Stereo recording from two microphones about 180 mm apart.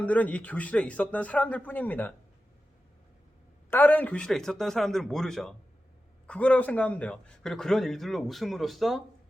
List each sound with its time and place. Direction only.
0.0 s speech: 10° left (ahead or behind)
3.7 s a man's voice: 10° left (ahead or behind)